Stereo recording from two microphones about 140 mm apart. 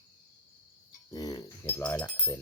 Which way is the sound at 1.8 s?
10° left (ahead or behind).